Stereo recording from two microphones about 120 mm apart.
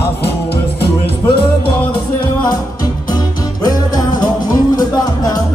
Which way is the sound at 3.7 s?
35° left (ahead or behind).